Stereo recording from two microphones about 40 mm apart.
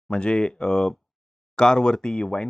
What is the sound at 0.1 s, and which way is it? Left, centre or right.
Speech, left.